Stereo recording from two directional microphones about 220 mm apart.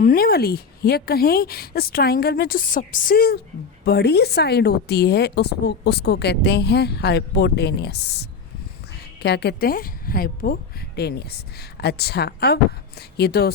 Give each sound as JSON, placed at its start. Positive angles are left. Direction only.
{"t": 0.0, "sound": "a woman's voice", "side_deg": 40}